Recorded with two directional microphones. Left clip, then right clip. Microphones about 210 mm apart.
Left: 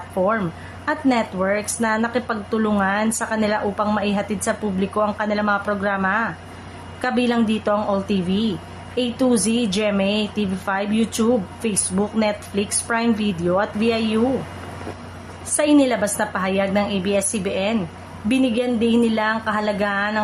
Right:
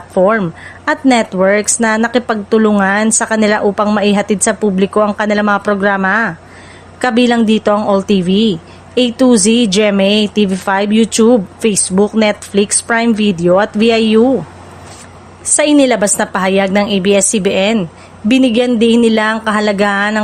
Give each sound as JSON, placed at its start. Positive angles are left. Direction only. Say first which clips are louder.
{"t": 0.2, "sound": "a woman's voice", "louder": "right 10 dB", "side_deg": -40}
{"t": 15.5, "sound": "a woman's voice", "louder": "right 7 dB", "side_deg": -40}